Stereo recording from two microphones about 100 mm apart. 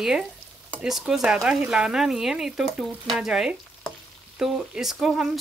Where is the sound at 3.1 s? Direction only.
5° right (ahead or behind).